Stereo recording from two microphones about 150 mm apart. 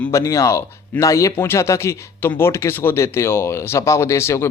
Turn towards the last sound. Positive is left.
turn(degrees=20)  # may be behind; listen again after turning